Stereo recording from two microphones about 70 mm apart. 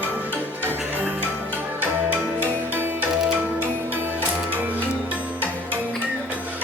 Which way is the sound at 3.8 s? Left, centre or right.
Right.